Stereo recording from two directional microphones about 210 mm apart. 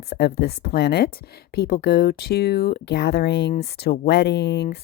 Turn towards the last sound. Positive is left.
turn(degrees=55)  # may be behind; listen again after turning